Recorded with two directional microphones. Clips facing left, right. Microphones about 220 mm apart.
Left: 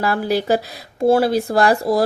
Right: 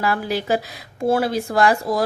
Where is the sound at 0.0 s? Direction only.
35° left (ahead or behind).